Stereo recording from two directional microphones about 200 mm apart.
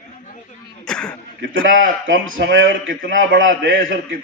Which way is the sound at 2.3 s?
65° right (ahead or behind).